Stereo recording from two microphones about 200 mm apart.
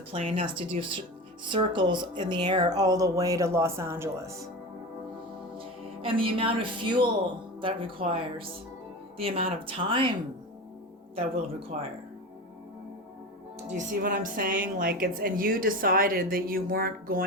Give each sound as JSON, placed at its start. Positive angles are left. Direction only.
{"t": 0.1, "sound": "speech", "side_deg": -30}
{"t": 5.5, "sound": "speech", "side_deg": -25}
{"t": 11.7, "sound": "speech", "side_deg": -35}
{"t": 13.7, "sound": "a woman's voice", "side_deg": -40}